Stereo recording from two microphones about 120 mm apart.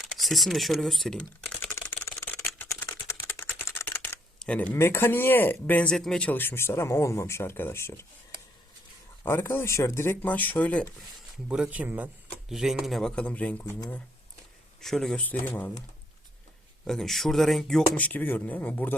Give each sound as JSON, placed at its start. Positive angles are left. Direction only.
{"t": 0.0, "sound": "speech", "side_deg": 0}
{"t": 3.1, "sound": "typing", "side_deg": 25}
{"t": 4.4, "sound": "speech", "side_deg": 10}
{"t": 9.2, "sound": "speech", "side_deg": 20}
{"t": 11.4, "sound": "speech", "side_deg": -10}
{"t": 12.5, "sound": "speech", "side_deg": -5}
{"t": 13.7, "sound": "speech", "side_deg": 30}
{"t": 14.8, "sound": "speech", "side_deg": 5}
{"t": 16.8, "sound": "speech", "side_deg": 5}